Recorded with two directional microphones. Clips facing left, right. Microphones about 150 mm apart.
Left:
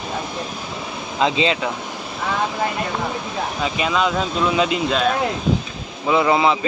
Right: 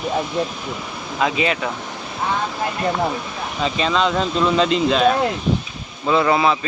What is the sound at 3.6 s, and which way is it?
Speech, 10° left (ahead or behind).